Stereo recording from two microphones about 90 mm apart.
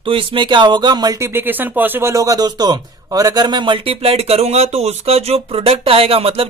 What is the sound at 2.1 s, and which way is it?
Speech, 45° right (ahead or behind).